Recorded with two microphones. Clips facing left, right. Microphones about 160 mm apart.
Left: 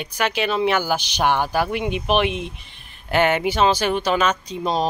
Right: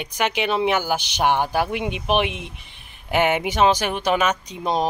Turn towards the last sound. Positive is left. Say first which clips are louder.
# left 1 dB
turn(degrees=-15)  # may be behind; listen again after turning